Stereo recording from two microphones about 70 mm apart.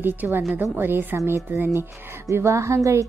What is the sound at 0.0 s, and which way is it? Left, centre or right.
A woman's voice, right.